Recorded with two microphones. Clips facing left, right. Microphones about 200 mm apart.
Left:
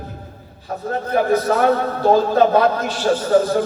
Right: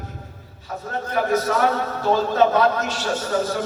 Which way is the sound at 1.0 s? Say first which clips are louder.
Left 4 dB; 35° left (ahead or behind).